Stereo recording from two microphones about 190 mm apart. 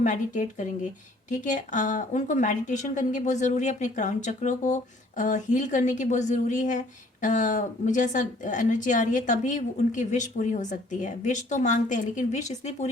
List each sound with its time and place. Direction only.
0.0 s a woman's voice: 40° left (ahead or behind)